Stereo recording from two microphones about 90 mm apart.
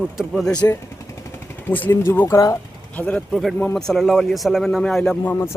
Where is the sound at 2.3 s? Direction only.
35° left (ahead or behind).